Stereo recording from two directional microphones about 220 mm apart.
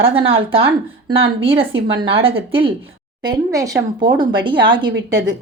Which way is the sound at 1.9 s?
25° right (ahead or behind).